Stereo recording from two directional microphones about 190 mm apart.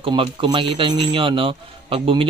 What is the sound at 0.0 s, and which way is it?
A man's voice, 25° right (ahead or behind).